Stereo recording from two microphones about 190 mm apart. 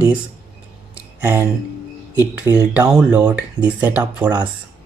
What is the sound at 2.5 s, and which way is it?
Speech, 15° right (ahead or behind).